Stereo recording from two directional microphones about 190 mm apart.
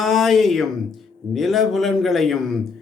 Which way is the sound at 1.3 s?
Centre (ahead or behind).